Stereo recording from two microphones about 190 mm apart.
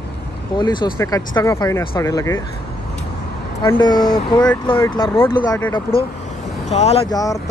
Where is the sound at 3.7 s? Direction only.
20° left (ahead or behind).